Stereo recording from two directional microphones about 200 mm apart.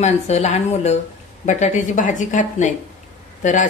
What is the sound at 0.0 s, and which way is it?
A woman's voice, 35° left (ahead or behind).